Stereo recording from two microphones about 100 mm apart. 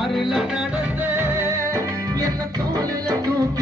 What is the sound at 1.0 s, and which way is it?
Music, 20° right (ahead or behind).